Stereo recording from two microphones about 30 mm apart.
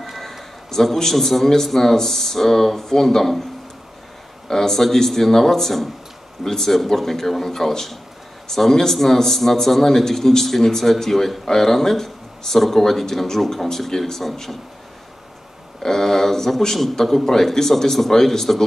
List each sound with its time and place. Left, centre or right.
0.2 s a sound: centre
0.7 s a man's voice: centre
4.5 s a man's voice: centre
15.8 s a man's voice: centre